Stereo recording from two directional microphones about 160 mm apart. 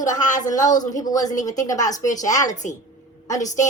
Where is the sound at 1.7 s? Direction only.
50° left (ahead or behind).